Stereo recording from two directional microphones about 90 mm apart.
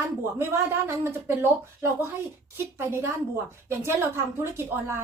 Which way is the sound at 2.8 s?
30° right (ahead or behind).